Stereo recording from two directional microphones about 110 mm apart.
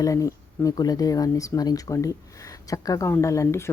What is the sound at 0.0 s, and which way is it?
Speech, 30° left (ahead or behind).